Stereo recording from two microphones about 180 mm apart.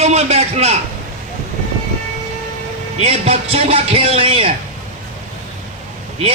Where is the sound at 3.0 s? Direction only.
35° right (ahead or behind).